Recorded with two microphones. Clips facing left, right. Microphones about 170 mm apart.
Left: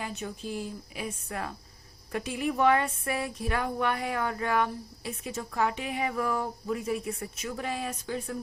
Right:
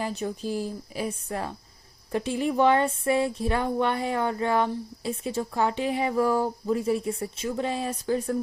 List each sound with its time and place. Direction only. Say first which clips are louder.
0.0 s a woman's voice: right 6 dB; 35° right (ahead or behind)